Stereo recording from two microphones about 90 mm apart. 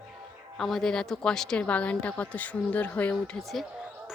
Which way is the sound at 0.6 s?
5° left (ahead or behind).